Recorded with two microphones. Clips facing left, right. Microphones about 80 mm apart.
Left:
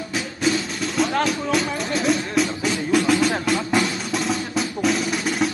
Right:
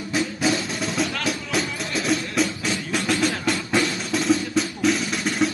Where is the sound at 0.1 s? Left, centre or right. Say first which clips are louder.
Even; centre.